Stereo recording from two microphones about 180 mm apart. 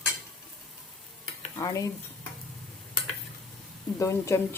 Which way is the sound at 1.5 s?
20° left (ahead or behind).